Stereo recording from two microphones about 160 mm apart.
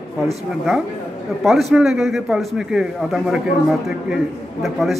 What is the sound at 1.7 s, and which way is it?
Speech, 5° right (ahead or behind).